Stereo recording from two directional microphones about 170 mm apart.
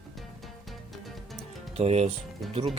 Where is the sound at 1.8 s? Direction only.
35° right (ahead or behind).